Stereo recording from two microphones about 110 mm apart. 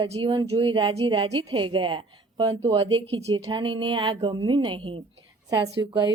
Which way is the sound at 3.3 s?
45° right (ahead or behind).